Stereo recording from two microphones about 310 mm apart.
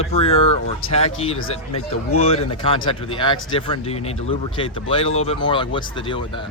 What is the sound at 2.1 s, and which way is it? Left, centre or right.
Speech, centre.